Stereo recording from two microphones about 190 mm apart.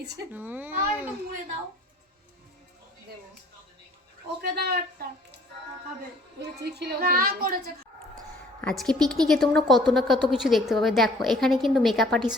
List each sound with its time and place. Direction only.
0.3 s speech: 10° right (ahead or behind)
4.4 s a woman's voice: 55° right (ahead or behind)
6.4 s a woman's voice: 60° right (ahead or behind)
8.6 s a woman's voice: centre (ahead or behind)